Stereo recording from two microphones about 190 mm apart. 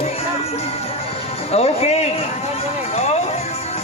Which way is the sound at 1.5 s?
35° left (ahead or behind).